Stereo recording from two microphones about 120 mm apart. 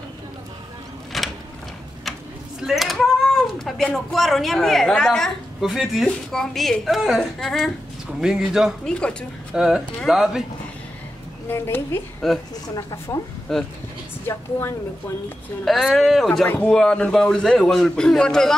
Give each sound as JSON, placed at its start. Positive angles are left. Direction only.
{"t": 1.1, "sound": "a sound", "side_deg": 0}
{"t": 2.6, "sound": "a man's voice", "side_deg": 0}
{"t": 8.8, "sound": "speech", "side_deg": 5}
{"t": 9.6, "sound": "a man's voice", "side_deg": -5}
{"t": 11.5, "sound": "a woman's voice", "side_deg": 20}
{"t": 12.2, "sound": "a man's voice", "side_deg": 0}
{"t": 12.7, "sound": "speech", "side_deg": 30}
{"t": 13.5, "sound": "a man's voice", "side_deg": 5}
{"t": 14.2, "sound": "a woman's voice", "side_deg": 20}
{"t": 15.6, "sound": "a man's voice", "side_deg": 0}